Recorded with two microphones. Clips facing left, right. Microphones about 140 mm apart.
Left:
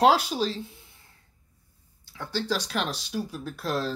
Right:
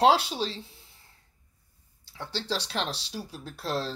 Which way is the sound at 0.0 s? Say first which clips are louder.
Left 1 dB; 30° right (ahead or behind).